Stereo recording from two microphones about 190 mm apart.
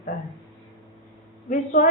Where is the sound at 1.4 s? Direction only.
45° left (ahead or behind).